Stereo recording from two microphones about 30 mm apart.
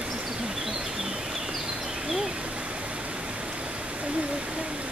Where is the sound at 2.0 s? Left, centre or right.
Right.